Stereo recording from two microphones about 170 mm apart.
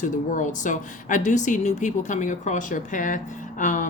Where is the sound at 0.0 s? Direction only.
50° left (ahead or behind).